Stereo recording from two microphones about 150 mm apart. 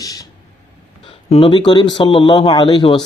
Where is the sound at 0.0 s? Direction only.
25° left (ahead or behind).